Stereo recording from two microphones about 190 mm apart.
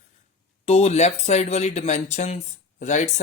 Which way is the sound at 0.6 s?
35° left (ahead or behind).